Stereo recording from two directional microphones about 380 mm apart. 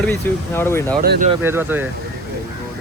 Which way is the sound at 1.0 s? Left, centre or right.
Centre.